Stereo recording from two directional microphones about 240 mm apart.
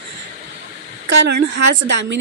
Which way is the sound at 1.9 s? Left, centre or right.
Right.